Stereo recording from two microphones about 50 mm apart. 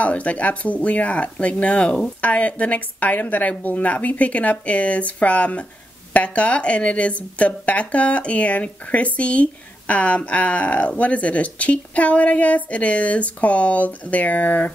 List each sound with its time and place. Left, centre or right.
0.0 s a woman's voice: left